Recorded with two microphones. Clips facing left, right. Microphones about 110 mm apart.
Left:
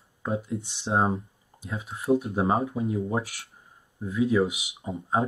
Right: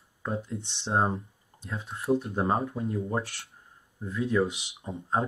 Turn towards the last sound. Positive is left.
turn(degrees=5)  # may be behind; listen again after turning